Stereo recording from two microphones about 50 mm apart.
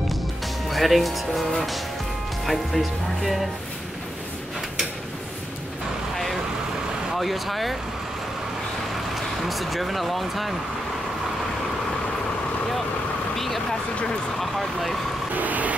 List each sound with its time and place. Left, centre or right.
0.7 s speech: centre
7.2 s speech: centre
9.1 s speech: centre
13.4 s vehicle: centre
14.4 s speech: centre
15.3 s vehicle: right